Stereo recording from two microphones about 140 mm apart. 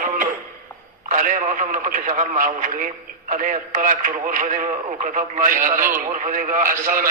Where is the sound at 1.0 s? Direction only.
70° right (ahead or behind).